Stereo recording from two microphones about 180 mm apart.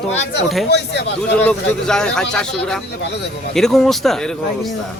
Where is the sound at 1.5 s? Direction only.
5° left (ahead or behind).